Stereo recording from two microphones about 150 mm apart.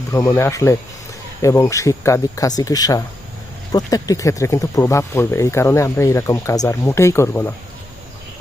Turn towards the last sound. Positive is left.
turn(degrees=15)  # may be behind; listen again after turning